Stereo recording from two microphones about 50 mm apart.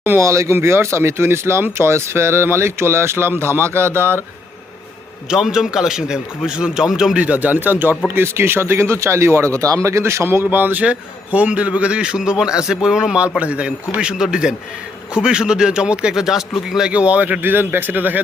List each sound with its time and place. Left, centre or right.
0.2 s speech: right
5.3 s a man's voice: centre
7.3 s speech: right
10.4 s a man's voice: right
10.8 s a man's voice: right; by 13.1 s centre
13.4 s a man's voice: right; by 16.9 s centre
16.9 s a man's voice: right
17.4 s a man's voice: right